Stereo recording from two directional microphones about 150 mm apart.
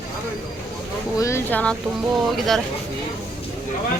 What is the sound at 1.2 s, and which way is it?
A child's voice, 20° left (ahead or behind).